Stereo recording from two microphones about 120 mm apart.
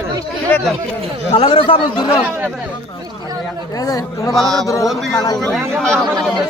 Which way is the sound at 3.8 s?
30° left (ahead or behind).